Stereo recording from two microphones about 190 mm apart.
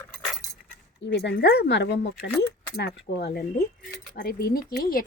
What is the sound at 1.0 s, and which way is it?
Speech, 65° left (ahead or behind).